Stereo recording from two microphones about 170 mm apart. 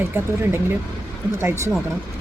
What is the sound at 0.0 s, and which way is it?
Speech, 10° right (ahead or behind).